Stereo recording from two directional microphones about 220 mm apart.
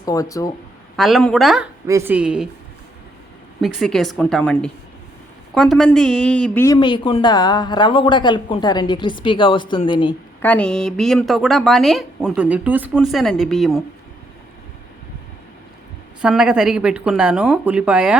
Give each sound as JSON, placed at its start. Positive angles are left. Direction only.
{"t": 0.0, "sound": "speech", "side_deg": 15}
{"t": 0.9, "sound": "a woman's voice", "side_deg": 0}
{"t": 3.6, "sound": "a woman's voice", "side_deg": 0}
{"t": 10.4, "sound": "a woman's voice", "side_deg": 5}
{"t": 16.2, "sound": "a woman's voice", "side_deg": -5}